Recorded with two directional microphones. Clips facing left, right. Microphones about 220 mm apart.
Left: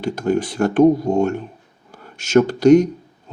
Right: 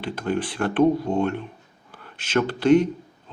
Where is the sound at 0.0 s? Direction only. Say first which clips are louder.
Left 6 dB; 45° left (ahead or behind).